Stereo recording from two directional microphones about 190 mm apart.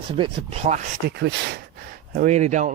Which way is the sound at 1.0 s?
60° right (ahead or behind).